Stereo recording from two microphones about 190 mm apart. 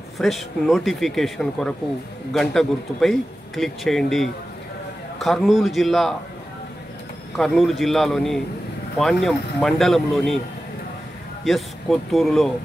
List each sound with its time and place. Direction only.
0.2 s speech: centre (ahead or behind)
7.3 s speech: centre (ahead or behind)
11.4 s speech: centre (ahead or behind)